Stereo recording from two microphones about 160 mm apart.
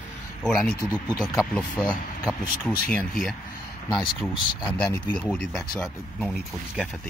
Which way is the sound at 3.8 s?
25° left (ahead or behind).